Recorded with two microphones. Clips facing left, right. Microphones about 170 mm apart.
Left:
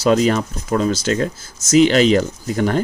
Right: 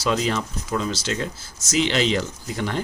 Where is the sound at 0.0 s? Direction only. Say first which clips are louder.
Left 8 dB; 45° left (ahead or behind).